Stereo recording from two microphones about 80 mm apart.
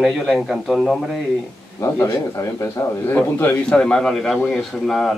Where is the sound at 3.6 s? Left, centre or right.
Centre.